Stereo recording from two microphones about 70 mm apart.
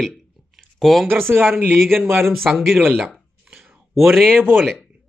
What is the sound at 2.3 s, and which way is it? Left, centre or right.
Speech, centre.